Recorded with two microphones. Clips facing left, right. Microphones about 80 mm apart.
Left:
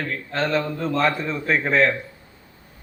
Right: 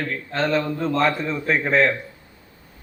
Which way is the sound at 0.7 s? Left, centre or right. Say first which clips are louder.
Right 2 dB; centre.